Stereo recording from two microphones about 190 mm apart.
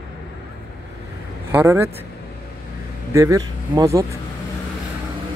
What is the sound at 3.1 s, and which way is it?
Speech, 15° right (ahead or behind).